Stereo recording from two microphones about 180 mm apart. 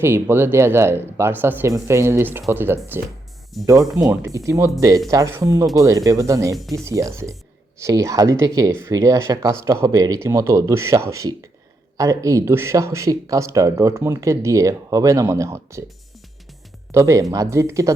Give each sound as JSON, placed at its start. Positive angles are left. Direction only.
{"t": 0.0, "sound": "speech", "side_deg": -15}
{"t": 6.6, "sound": "speech", "side_deg": 0}
{"t": 6.8, "sound": "speech", "side_deg": -15}
{"t": 16.9, "sound": "speech", "side_deg": -15}